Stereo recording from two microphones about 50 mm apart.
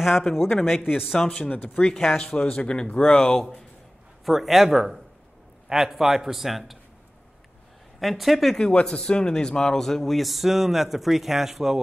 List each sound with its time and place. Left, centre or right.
0.0 s a man's voice: centre
2.3 s speech: left
4.3 s a man's voice: centre
8.0 s a man's voice: centre
8.9 s a man's voice: centre